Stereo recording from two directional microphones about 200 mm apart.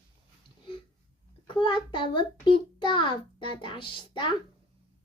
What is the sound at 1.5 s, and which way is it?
A child's voice, 25° left (ahead or behind).